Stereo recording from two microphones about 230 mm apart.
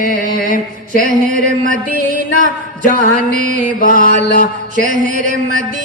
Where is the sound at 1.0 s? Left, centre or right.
Right.